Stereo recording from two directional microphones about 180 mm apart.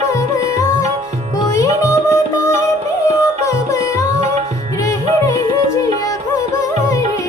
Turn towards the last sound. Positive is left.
turn(degrees=20)  # may be behind; listen again after turning